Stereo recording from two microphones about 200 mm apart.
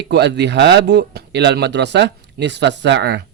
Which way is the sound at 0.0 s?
55° right (ahead or behind).